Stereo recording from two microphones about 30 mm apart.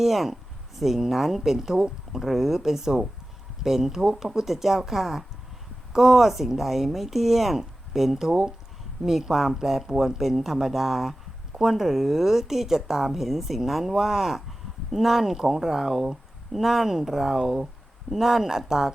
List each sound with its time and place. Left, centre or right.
0.0 s a woman's voice: centre
8.3 s speech: right
9.0 s a woman's voice: centre